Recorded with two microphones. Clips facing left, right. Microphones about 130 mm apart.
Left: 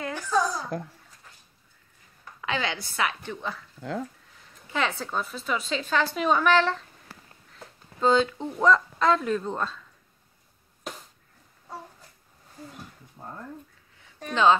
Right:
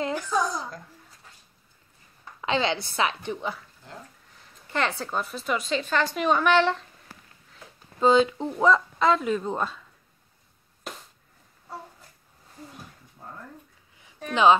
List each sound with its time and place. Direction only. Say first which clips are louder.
0.1 s babbling: even; 10° right (ahead or behind)
2.4 s a woman's voice: right 4 dB; 25° right (ahead or behind)
4.6 s a woman's voice: right 1 dB; centre (ahead or behind)
5.8 s a woman's voice: even; 5° left (ahead or behind)
7.5 s a sound: right 1 dB; 5° right (ahead or behind)
8.5 s speech: even; 5° right (ahead or behind)
13.2 s a sound: left 2 dB; 35° left (ahead or behind)
14.3 s speech: right 2 dB; 15° right (ahead or behind)